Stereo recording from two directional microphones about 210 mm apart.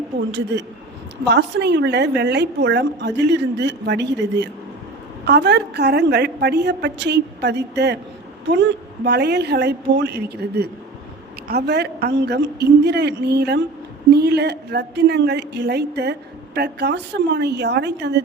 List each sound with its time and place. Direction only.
0.3 s a woman's voice: 55° right (ahead or behind)
9.0 s a woman's voice: 50° right (ahead or behind)